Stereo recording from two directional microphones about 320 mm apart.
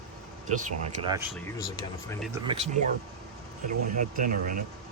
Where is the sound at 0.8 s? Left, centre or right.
Centre.